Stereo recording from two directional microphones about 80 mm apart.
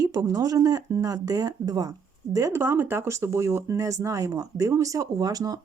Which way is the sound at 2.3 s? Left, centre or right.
Right.